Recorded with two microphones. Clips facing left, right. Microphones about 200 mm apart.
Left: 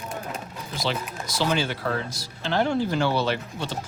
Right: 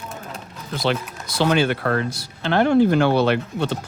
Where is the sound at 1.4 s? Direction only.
60° right (ahead or behind).